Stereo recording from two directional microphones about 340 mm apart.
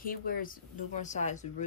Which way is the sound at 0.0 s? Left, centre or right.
Left.